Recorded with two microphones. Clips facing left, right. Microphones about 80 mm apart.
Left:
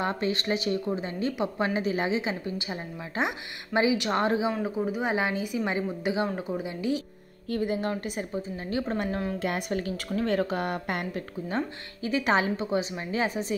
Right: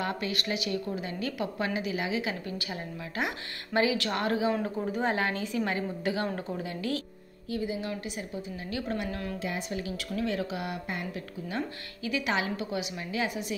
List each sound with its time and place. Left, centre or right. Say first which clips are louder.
0.0 s speech: left 4 dB; left
4.5 s a woman's voice: left 1 dB; centre
7.4 s a woman's voice: left 4 dB; left
7.9 s a woman's voice: left 4 dB; left
9.4 s a woman's voice: left 4 dB; left
11.1 s a woman's voice: left 4 dB; left